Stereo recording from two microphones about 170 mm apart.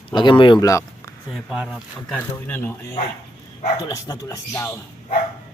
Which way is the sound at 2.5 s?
10° left (ahead or behind).